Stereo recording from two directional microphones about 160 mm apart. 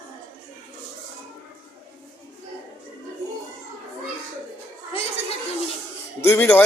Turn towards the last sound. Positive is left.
turn(degrees=10)  # may be behind; listen again after turning